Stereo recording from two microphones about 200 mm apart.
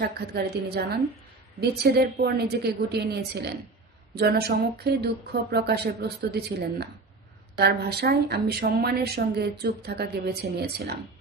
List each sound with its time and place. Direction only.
0.0 s speech: 55° right (ahead or behind)